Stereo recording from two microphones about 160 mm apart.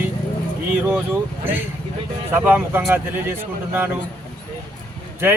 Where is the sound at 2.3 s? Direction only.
10° right (ahead or behind).